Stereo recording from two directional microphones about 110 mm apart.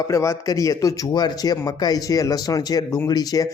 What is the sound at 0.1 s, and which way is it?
Speech, 25° left (ahead or behind).